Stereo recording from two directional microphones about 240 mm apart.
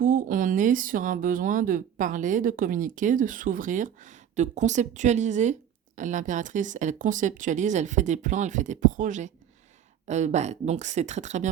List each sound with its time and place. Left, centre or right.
0.0 s speech: right